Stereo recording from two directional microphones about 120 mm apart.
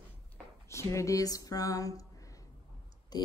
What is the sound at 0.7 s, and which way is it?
Speech, 25° left (ahead or behind).